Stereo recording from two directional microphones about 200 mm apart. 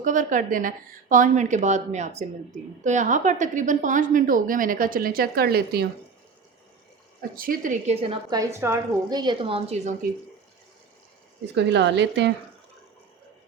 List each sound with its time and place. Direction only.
0.0 s a woman's voice: 40° right (ahead or behind)
7.2 s a woman's voice: 45° right (ahead or behind)
8.0 s a woman's voice: 25° right (ahead or behind)
11.5 s a woman's voice: 60° right (ahead or behind)